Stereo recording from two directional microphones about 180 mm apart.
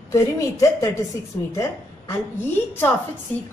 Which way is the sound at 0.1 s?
20° left (ahead or behind).